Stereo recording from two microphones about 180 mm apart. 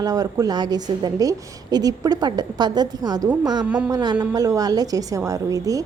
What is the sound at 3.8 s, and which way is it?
A woman's voice, 20° right (ahead or behind).